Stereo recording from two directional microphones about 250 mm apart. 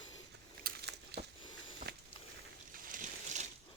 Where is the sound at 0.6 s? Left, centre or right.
Right.